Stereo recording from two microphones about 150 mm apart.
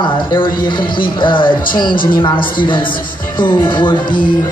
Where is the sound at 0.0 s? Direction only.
30° left (ahead or behind).